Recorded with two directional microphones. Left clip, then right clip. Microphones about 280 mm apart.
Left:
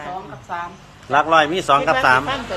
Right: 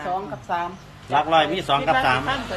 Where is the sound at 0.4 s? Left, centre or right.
Right.